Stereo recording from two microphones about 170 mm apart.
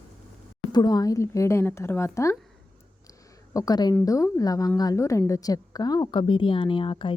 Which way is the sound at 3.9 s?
20° left (ahead or behind).